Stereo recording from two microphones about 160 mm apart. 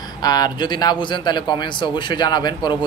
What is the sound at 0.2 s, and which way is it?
A man's voice, 25° left (ahead or behind).